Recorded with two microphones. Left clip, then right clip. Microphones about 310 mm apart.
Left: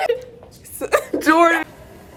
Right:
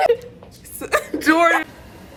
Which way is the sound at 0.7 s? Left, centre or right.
Centre.